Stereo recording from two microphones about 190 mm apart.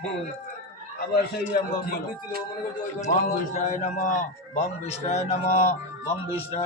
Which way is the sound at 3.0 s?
40° left (ahead or behind).